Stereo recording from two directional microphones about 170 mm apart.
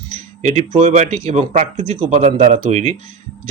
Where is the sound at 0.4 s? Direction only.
40° right (ahead or behind).